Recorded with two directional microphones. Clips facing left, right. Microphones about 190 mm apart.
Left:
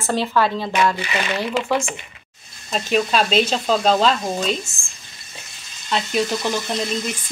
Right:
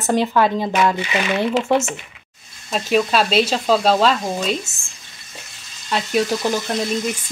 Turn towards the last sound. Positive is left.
turn(degrees=-5)  # may be behind; listen again after turning